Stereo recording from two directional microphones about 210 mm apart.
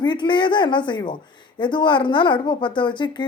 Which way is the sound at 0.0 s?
20° left (ahead or behind).